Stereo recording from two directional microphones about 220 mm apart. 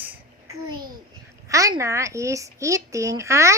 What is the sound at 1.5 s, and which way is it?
A woman's voice, 15° right (ahead or behind).